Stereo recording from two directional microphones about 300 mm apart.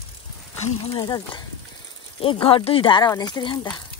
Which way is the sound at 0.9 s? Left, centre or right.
Centre.